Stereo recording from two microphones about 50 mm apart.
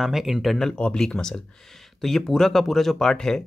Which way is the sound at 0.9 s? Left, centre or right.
Centre.